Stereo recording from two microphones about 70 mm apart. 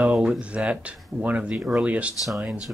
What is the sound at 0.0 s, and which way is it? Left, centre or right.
Speech, centre.